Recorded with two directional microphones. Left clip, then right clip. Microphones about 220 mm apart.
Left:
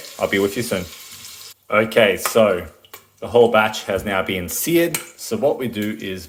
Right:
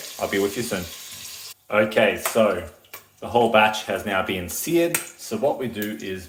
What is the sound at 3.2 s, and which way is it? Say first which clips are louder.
Speech: left 3 dB; 25° left (ahead or behind).